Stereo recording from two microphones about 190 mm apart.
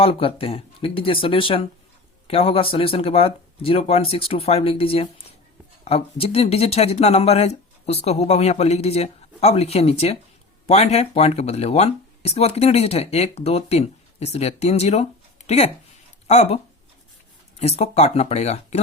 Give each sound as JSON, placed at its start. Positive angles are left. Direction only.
{"t": 0.0, "sound": "speech", "side_deg": 30}
{"t": 17.6, "sound": "speech", "side_deg": 35}